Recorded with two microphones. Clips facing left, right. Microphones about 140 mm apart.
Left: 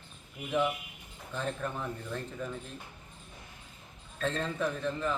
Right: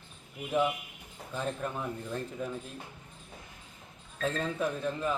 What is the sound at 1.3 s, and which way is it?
A man's voice, 10° right (ahead or behind).